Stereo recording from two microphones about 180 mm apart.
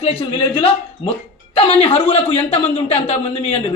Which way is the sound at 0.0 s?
35° left (ahead or behind).